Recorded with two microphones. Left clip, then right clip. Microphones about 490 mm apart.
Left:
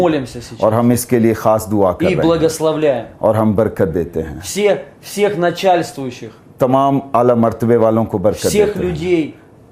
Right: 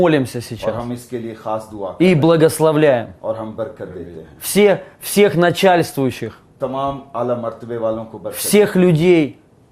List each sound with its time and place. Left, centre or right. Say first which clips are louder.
0.0 s speech: right 1 dB; right
0.9 s a man's voice: left 13 dB; left
2.0 s speech: right 1 dB; right
3.2 s a man's voice: left 10 dB; left
4.4 s speech: right 2 dB; right
6.6 s a man's voice: left 8 dB; left
8.3 s speech: right 1 dB; right